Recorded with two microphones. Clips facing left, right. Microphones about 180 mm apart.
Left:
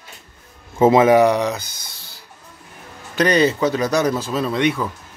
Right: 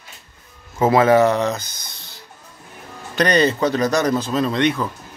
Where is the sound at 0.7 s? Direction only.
20° left (ahead or behind).